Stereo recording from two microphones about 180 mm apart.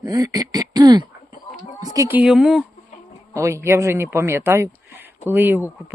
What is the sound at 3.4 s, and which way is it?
Speech, 15° right (ahead or behind).